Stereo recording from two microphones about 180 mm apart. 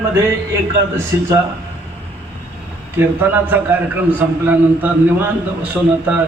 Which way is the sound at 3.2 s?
10° right (ahead or behind).